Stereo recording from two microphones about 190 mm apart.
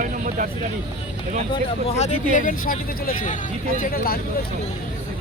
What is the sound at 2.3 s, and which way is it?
Speech, 45° left (ahead or behind).